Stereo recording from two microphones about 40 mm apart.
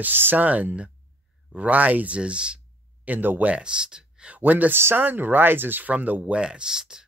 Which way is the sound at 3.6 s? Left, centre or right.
Right.